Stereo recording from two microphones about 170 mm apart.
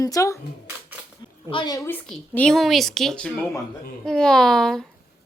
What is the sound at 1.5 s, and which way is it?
Speech, 25° left (ahead or behind).